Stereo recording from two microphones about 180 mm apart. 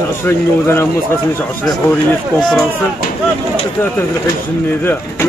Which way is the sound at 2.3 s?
Centre (ahead or behind).